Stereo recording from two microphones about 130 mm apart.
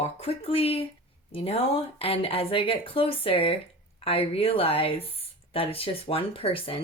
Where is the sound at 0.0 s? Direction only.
50° left (ahead or behind).